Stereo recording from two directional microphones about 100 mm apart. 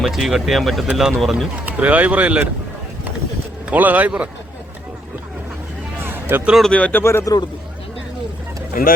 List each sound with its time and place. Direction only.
0.0 s speech: 5° right (ahead or behind)
1.6 s speech: 15° right (ahead or behind)
3.7 s speech: 15° right (ahead or behind)
6.0 s a sound: 20° right (ahead or behind)
6.5 s speech: 5° left (ahead or behind)
7.0 s a man's voice: 25° left (ahead or behind)